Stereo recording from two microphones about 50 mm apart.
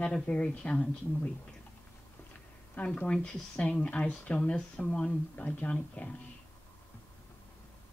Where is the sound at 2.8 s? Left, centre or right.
Left.